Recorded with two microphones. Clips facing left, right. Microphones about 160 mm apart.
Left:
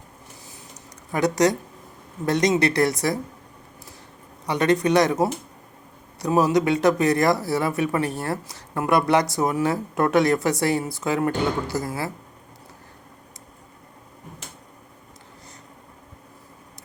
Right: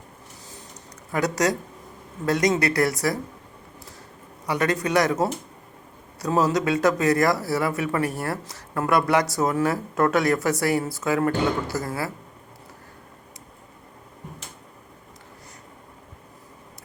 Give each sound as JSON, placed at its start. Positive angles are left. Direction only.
{"t": 1.1, "sound": "speech", "side_deg": 20}
{"t": 4.4, "sound": "speech", "side_deg": 20}